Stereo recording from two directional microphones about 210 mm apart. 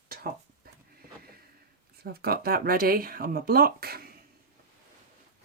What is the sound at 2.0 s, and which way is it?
Speech, 45° right (ahead or behind).